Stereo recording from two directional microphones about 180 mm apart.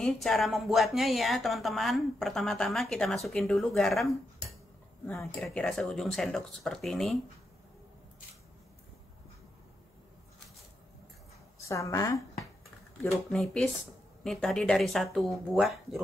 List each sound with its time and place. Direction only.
0.0 s a woman's voice: centre (ahead or behind)
11.6 s speech: 15° left (ahead or behind)
13.0 s a woman's voice: 5° left (ahead or behind)